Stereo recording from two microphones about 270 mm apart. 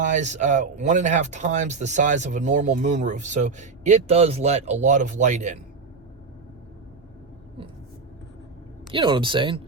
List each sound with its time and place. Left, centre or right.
0.0 s speech: right
8.9 s speech: centre